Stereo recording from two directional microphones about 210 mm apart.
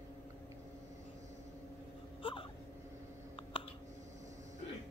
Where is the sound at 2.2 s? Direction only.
25° left (ahead or behind).